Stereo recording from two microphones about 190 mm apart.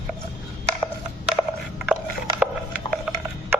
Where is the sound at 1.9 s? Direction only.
10° right (ahead or behind).